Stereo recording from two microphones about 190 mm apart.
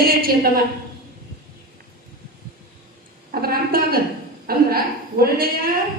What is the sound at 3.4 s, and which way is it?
A woman's voice, 50° right (ahead or behind).